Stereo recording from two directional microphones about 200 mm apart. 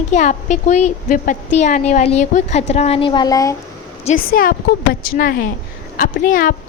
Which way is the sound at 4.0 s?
40° left (ahead or behind).